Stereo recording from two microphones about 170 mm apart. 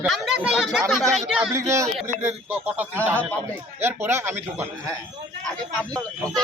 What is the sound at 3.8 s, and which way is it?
Speech, 15° right (ahead or behind).